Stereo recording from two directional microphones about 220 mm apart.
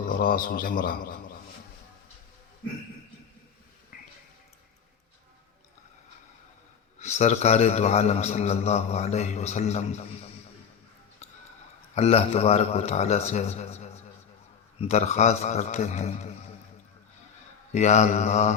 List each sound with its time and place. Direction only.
0.1 s a man's voice: 40° left (ahead or behind)
7.0 s a man's voice: 30° left (ahead or behind)
11.9 s a man's voice: 30° left (ahead or behind)
17.7 s a man's voice: 30° left (ahead or behind)